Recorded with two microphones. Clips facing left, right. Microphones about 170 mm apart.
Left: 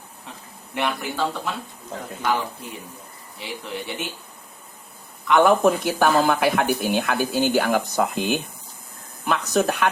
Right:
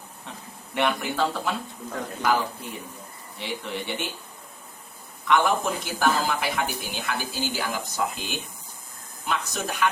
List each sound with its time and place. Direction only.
0.3 s speech: centre (ahead or behind)
5.4 s speech: 60° left (ahead or behind)